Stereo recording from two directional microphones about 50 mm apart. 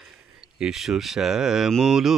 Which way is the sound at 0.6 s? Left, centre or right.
Centre.